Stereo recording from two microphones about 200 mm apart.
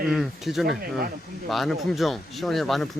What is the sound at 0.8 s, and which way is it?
Speech, 50° right (ahead or behind).